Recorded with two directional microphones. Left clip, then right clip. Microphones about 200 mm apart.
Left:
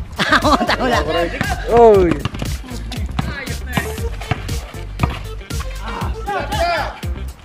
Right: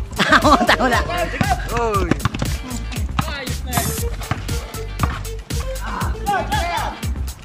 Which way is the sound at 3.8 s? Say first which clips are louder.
Left 1 dB; centre (ahead or behind).